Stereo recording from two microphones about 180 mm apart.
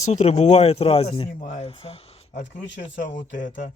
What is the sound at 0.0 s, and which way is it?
Speech, 40° left (ahead or behind).